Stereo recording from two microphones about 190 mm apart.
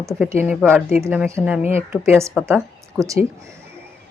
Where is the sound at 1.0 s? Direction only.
10° right (ahead or behind).